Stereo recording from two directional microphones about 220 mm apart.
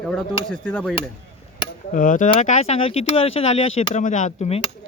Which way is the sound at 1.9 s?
35° left (ahead or behind).